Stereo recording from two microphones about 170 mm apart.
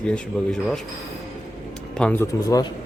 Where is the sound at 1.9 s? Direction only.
10° left (ahead or behind).